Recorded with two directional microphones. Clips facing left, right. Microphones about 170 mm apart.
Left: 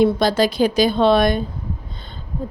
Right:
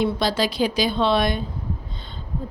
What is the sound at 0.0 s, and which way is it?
A woman's voice, 50° left (ahead or behind).